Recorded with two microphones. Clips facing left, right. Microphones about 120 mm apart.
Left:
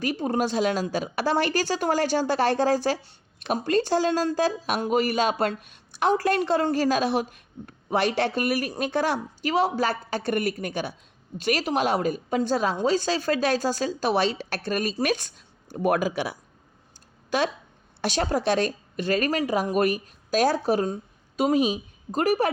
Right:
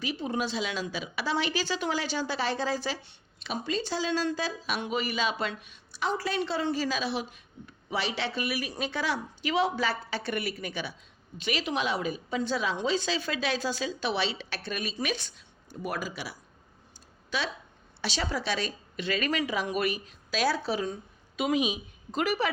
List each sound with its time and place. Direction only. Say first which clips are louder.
0.0 s speech: left 6 dB; 45° left (ahead or behind)
15.7 s speech: left 11 dB; 55° left (ahead or behind)
18.0 s speech: left 7 dB; 50° left (ahead or behind)